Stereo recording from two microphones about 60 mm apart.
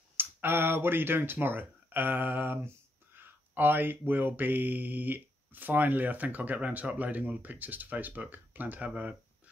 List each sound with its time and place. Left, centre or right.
0.2 s speech: right